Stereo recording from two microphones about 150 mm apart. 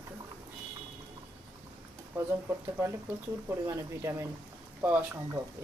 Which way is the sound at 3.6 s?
20° right (ahead or behind).